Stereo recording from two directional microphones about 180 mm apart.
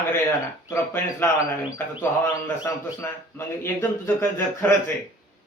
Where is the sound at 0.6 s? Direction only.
15° left (ahead or behind).